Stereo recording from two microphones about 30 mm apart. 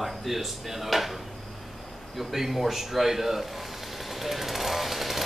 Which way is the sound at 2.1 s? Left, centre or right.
Centre.